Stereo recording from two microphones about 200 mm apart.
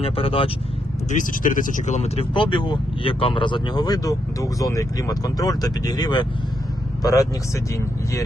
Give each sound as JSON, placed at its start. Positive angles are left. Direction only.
{"t": 0.0, "sound": "speech", "side_deg": 30}
{"t": 1.1, "sound": "a man's voice", "side_deg": 40}